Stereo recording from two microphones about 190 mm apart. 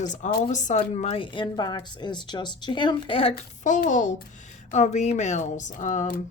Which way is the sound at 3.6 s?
40° left (ahead or behind).